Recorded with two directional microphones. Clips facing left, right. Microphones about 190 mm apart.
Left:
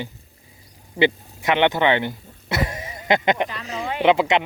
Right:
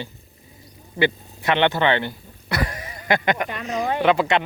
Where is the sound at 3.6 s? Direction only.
35° right (ahead or behind).